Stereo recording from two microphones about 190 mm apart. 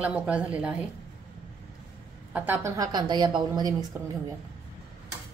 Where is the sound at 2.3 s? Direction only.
10° right (ahead or behind).